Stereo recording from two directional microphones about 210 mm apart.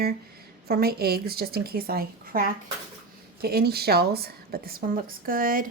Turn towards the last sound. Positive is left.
turn(degrees=-40)  # may be behind; listen again after turning